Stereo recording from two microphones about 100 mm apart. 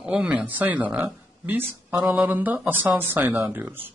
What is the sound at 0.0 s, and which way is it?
Speech, 15° right (ahead or behind).